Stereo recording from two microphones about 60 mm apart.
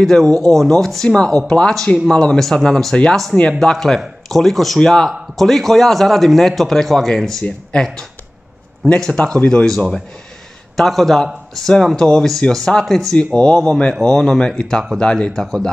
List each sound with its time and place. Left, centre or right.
0.0 s a man's voice: centre
10.8 s a man's voice: centre